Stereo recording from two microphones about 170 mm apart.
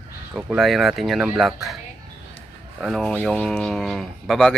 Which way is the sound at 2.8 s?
Centre (ahead or behind).